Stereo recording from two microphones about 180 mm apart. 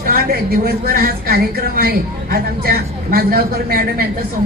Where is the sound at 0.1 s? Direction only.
55° right (ahead or behind).